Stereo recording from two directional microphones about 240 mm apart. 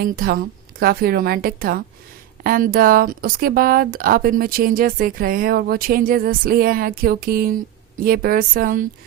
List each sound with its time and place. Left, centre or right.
0.0 s speech: right